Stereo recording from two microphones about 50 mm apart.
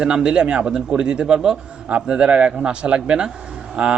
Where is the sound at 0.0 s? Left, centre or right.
Centre.